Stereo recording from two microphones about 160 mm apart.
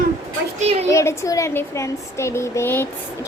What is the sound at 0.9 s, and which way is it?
A woman's voice, 15° left (ahead or behind).